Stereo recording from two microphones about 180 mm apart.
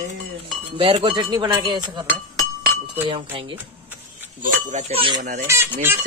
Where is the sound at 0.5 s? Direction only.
30° right (ahead or behind).